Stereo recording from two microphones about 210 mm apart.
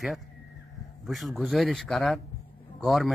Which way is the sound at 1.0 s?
Centre (ahead or behind).